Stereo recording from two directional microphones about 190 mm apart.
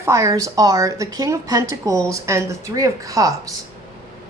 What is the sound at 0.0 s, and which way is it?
Speech, 15° right (ahead or behind).